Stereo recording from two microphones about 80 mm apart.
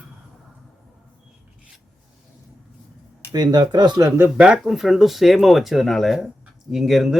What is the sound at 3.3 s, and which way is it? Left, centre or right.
Speech, right.